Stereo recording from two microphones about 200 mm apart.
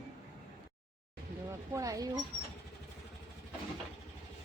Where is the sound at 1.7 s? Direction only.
15° right (ahead or behind).